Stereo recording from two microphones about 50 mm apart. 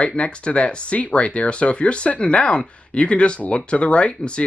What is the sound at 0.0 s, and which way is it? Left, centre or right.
Speech, left.